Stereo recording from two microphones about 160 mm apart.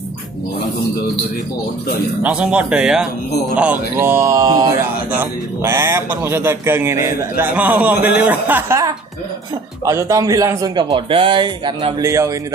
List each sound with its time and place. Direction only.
2.2 s a man's voice: 5° right (ahead or behind)